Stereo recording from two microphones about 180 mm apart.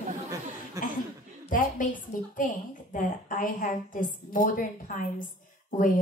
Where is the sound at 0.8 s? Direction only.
15° right (ahead or behind).